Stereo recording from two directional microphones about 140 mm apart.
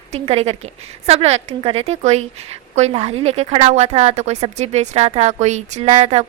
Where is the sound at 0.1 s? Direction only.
50° right (ahead or behind).